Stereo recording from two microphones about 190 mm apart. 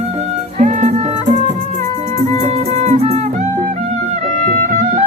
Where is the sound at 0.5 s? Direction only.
40° right (ahead or behind).